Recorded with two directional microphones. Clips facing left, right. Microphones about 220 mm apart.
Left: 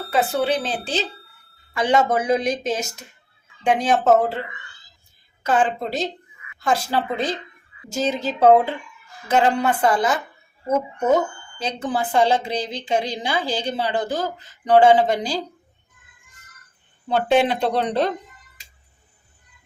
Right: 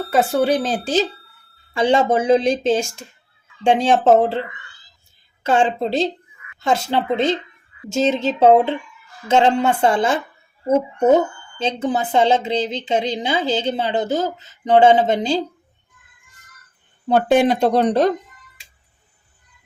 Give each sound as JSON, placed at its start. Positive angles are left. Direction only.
{"t": 0.1, "sound": "speech", "side_deg": -45}
{"t": 1.7, "sound": "a woman's voice", "side_deg": -30}
{"t": 17.1, "sound": "speech", "side_deg": -45}